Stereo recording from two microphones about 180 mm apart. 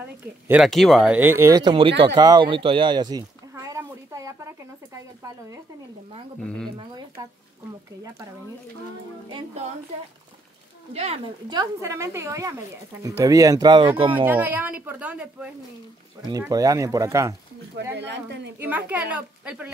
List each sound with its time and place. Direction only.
0.5 s speech: centre (ahead or behind); by 2.0 s 30° right (ahead or behind)
2.1 s a sound: 25° right (ahead or behind)
6.4 s speech: 5° left (ahead or behind)
6.8 s speech: 25° right (ahead or behind)
10.9 s speech: 35° right (ahead or behind)
11.4 s speech: 20° right (ahead or behind)
14.2 s speech: 10° right (ahead or behind)
16.2 s speech: 20° right (ahead or behind)
17.9 s speech: 75° right (ahead or behind)
18.6 s speech: 10° right (ahead or behind)